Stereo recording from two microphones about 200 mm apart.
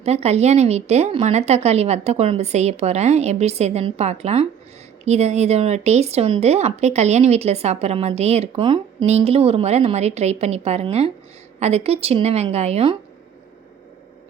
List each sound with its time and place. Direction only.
0.0 s speech: 30° right (ahead or behind)